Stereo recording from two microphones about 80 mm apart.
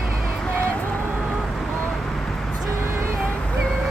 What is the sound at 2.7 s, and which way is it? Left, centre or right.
Vehicle, right.